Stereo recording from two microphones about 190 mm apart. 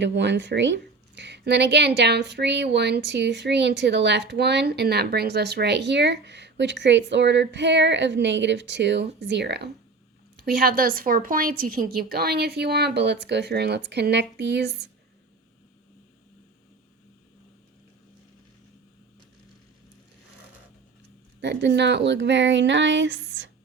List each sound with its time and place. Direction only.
0.0 s speech: 65° right (ahead or behind)
21.4 s speech: 65° right (ahead or behind)